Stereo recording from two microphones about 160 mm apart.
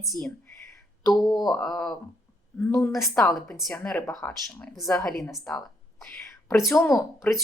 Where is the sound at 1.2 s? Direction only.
25° left (ahead or behind).